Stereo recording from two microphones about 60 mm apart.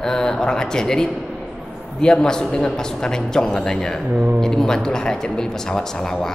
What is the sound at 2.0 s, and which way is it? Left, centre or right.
Speech, centre.